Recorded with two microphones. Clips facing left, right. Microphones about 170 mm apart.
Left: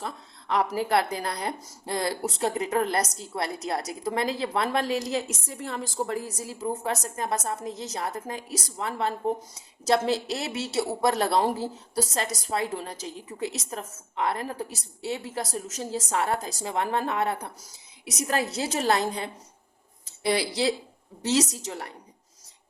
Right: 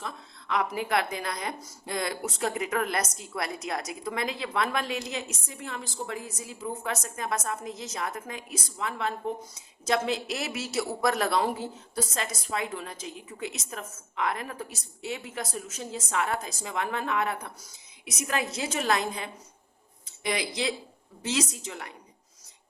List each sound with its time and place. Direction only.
0.0 s speech: 35° left (ahead or behind)